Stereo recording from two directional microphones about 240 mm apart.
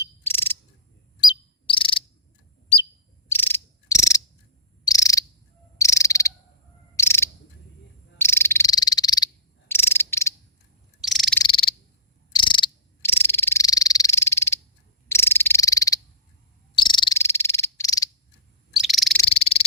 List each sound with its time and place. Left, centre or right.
0.0 s cricket: centre
1.2 s cricket: centre
3.2 s cricket: centre
8.2 s frog: centre
11.0 s frog: centre
11.4 s frog: left
12.3 s cricket: centre
15.1 s frog: centre
18.7 s owl: centre
19.2 s frog: left